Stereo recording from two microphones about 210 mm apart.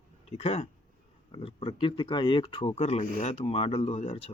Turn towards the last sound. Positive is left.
turn(degrees=30)  # may be behind; listen again after turning